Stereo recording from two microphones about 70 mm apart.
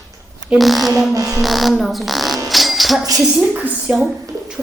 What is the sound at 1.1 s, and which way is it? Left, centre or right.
Music, right.